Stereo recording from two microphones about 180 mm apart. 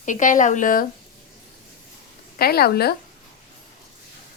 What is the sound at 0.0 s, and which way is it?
Speech, 45° left (ahead or behind).